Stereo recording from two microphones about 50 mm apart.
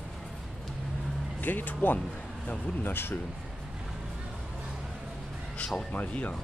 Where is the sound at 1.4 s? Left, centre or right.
Left.